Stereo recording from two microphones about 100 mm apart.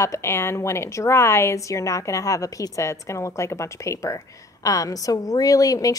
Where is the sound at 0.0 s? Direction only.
25° left (ahead or behind).